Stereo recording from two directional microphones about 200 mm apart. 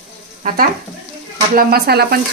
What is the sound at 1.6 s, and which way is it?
Speech, 50° right (ahead or behind).